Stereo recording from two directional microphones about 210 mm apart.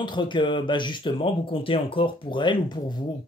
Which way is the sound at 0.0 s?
20° left (ahead or behind).